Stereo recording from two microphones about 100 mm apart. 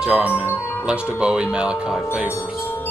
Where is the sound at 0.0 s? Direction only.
15° right (ahead or behind).